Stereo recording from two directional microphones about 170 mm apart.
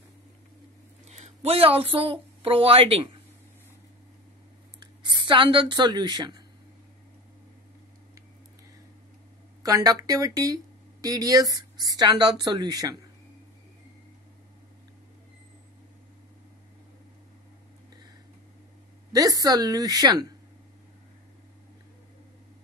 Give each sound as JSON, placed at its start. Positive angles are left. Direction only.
{"t": 1.0, "sound": "a sound", "side_deg": -40}
{"t": 2.0, "sound": "a woman's voice", "side_deg": -35}
{"t": 5.0, "sound": "speech", "side_deg": -25}
{"t": 9.6, "sound": "speech", "side_deg": -20}
{"t": 19.1, "sound": "speech", "side_deg": -20}